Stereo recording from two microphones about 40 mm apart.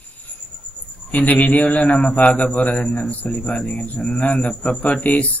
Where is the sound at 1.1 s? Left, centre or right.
Left.